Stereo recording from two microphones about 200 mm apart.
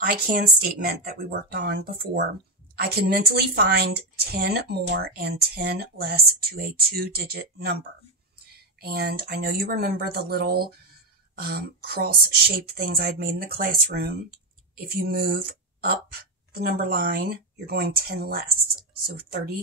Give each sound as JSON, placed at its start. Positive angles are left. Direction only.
{"t": 0.0, "sound": "a woman's voice", "side_deg": -45}